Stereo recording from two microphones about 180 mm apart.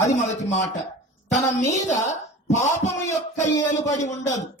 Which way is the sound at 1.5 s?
40° left (ahead or behind).